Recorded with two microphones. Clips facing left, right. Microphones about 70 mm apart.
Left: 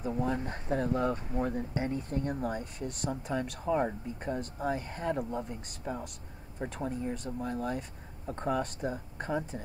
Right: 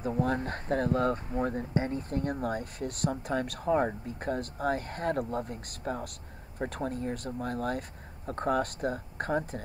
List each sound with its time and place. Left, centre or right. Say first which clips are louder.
0.2 s speech: right 3 dB; right
1.4 s speech: right 2 dB; right